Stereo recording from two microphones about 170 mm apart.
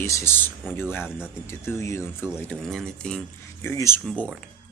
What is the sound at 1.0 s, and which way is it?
Speech, 5° right (ahead or behind).